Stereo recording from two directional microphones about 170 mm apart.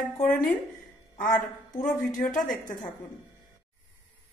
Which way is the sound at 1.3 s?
10° left (ahead or behind).